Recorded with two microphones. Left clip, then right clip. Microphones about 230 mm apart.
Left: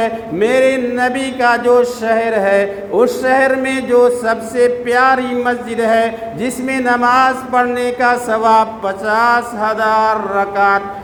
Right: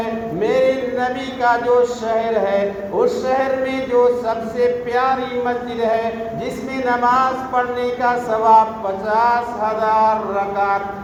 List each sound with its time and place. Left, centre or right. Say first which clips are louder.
0.0 s speech: left 5 dB; left